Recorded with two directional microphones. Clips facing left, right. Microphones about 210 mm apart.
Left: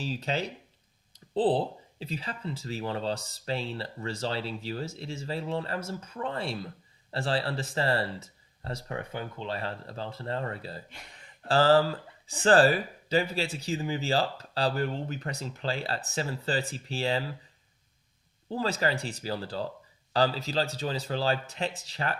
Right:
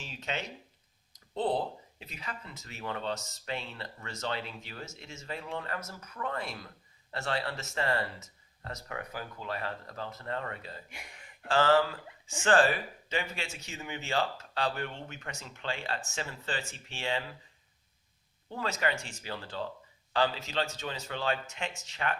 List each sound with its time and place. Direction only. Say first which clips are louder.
0.0 s speech: left 7 dB; 35° left (ahead or behind)
10.8 s speech: even; 10° right (ahead or behind)
11.4 s speech: left 3 dB; 35° left (ahead or behind)
18.4 s speech: left 4 dB; 35° left (ahead or behind)